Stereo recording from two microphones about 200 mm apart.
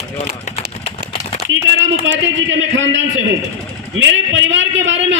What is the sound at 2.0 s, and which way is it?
A man's voice, 65° right (ahead or behind).